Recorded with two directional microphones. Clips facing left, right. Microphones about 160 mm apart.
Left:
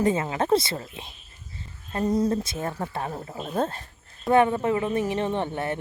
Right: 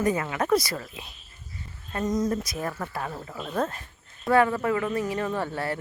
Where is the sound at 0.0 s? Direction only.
25° left (ahead or behind).